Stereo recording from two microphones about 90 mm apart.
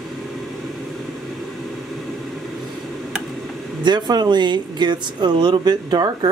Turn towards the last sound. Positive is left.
turn(degrees=-50)  # may be behind; listen again after turning